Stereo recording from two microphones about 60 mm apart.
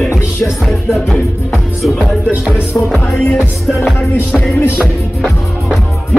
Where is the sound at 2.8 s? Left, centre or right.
Left.